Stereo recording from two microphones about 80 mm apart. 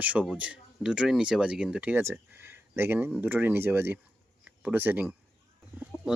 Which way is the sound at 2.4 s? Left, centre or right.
Right.